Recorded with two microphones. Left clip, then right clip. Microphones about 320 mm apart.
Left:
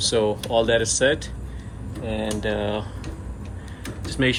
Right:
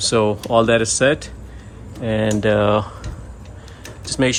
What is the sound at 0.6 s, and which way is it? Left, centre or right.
Speech, right.